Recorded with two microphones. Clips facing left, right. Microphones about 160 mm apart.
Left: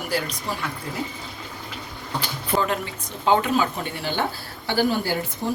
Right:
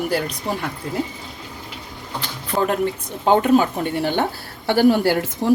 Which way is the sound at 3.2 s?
50° right (ahead or behind).